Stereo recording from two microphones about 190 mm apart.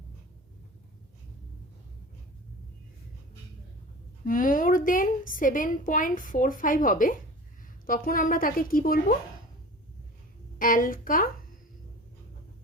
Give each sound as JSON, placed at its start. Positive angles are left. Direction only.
{"t": 4.3, "sound": "a woman's voice", "side_deg": 45}
{"t": 10.6, "sound": "a woman's voice", "side_deg": 45}